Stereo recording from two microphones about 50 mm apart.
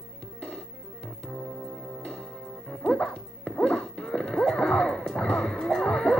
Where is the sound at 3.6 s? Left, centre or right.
Centre.